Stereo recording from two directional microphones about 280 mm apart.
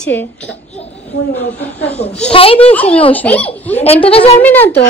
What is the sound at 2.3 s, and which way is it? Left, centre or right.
Speech, centre.